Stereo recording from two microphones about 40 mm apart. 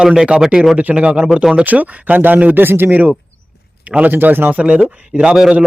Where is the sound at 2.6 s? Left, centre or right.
Right.